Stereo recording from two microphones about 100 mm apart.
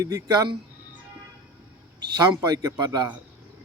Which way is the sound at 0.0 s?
40° right (ahead or behind).